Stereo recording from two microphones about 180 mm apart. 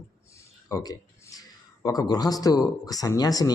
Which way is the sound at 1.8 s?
20° left (ahead or behind).